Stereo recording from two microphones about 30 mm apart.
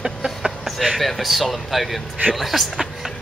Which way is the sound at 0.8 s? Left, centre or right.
Centre.